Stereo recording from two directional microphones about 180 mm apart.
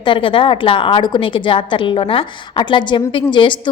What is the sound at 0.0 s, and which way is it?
A woman's voice, 25° left (ahead or behind).